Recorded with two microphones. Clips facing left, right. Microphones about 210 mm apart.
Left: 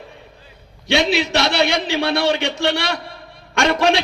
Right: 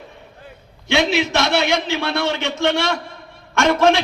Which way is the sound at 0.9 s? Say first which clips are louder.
Even; 15° left (ahead or behind).